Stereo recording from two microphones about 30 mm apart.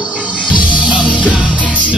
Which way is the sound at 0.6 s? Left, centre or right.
Right.